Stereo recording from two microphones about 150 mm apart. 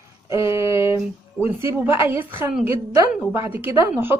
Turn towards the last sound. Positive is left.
turn(degrees=-15)  # may be behind; listen again after turning